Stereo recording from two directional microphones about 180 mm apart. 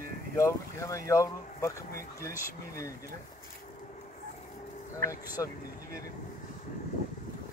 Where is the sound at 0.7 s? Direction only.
15° left (ahead or behind).